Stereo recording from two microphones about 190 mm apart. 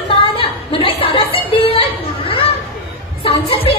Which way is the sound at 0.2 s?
30° left (ahead or behind).